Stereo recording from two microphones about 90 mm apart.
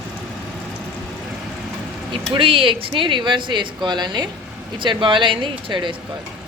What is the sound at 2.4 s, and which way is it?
A woman's voice, 90° right.